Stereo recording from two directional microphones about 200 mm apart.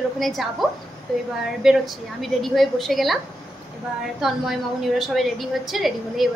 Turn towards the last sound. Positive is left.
turn(degrees=0)  # may be behind; listen again after turning